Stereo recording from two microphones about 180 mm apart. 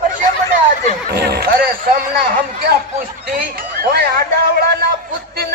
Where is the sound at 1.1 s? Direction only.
65° right (ahead or behind).